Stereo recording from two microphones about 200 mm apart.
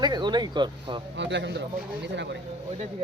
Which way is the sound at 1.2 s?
60° right (ahead or behind).